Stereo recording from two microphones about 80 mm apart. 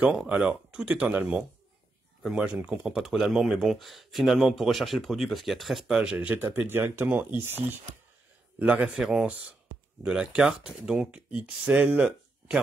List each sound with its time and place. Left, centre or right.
0.3 s speech: centre
2.2 s speech: centre
6.1 s speech: right
8.9 s speech: centre